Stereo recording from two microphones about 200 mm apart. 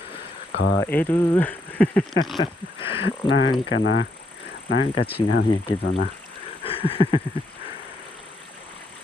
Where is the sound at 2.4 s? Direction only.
25° left (ahead or behind).